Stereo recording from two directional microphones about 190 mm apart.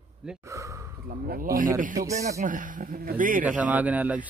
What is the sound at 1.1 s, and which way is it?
Speech, 50° right (ahead or behind).